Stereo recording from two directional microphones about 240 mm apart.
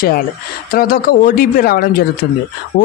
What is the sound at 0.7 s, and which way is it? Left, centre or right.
Speech, left.